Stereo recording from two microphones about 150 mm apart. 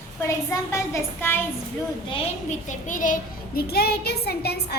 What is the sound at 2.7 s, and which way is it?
A child's voice, 60° left (ahead or behind).